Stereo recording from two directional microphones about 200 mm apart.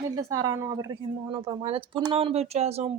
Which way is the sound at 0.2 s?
15° right (ahead or behind).